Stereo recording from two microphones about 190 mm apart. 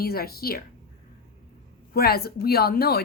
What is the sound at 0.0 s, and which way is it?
Speech, 55° left (ahead or behind).